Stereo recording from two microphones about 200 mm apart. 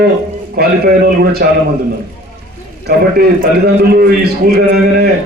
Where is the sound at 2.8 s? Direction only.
50° right (ahead or behind).